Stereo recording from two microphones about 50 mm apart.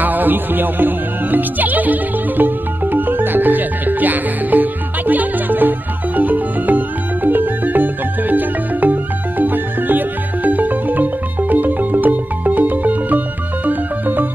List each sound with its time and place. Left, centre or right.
0.0 s speech: right
7.2 s music: right